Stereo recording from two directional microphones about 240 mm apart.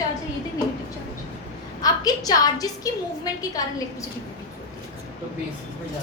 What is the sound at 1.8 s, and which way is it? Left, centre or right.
A woman's voice, centre.